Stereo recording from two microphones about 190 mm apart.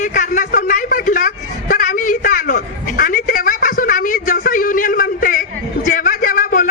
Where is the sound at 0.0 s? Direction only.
40° left (ahead or behind).